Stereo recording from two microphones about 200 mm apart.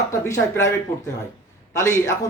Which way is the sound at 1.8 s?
15° left (ahead or behind).